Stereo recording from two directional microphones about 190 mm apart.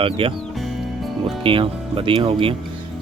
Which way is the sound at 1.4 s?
25° right (ahead or behind).